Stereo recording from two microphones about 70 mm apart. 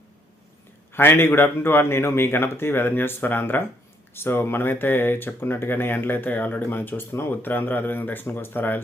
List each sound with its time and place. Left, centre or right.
0.9 s a man's voice: left